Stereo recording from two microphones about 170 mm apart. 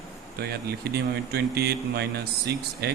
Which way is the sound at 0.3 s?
70° right (ahead or behind).